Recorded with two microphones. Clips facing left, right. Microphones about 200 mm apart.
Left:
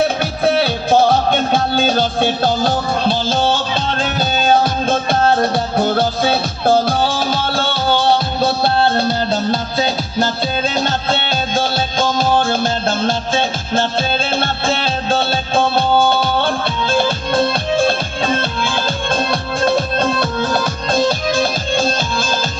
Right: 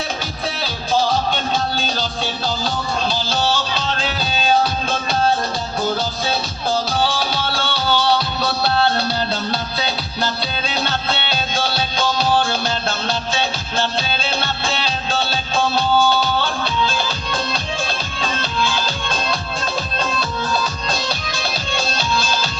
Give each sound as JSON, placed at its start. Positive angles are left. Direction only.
{"t": 0.4, "sound": "music", "side_deg": 60}
{"t": 20.9, "sound": "music", "side_deg": 50}